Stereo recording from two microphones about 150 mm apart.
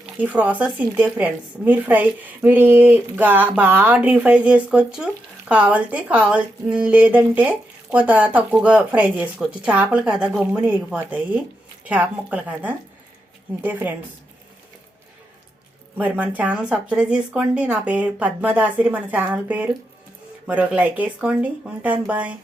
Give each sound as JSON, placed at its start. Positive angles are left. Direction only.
{"t": 0.0, "sound": "a woman's voice", "side_deg": -10}
{"t": 16.0, "sound": "a woman's voice", "side_deg": -10}